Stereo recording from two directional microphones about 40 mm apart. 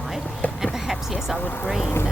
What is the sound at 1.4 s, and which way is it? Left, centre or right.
Speech, left.